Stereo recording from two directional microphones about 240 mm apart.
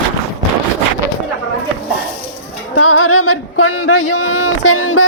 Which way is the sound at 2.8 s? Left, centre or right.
Left.